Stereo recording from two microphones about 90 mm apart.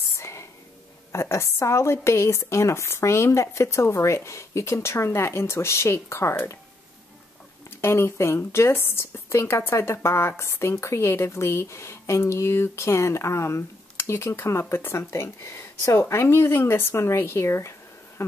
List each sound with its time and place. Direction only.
0.1 s whispering: 30° left (ahead or behind)
1.1 s a woman's voice: 30° left (ahead or behind)
7.8 s speech: 30° left (ahead or behind)